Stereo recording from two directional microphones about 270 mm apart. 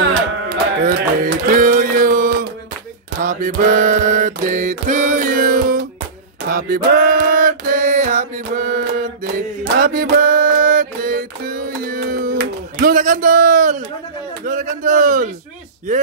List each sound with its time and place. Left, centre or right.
0.0 s music: right
3.2 s mantra: right
6.5 s music: right
14.4 s speech: right